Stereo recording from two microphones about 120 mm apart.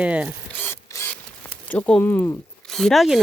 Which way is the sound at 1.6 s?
10° left (ahead or behind).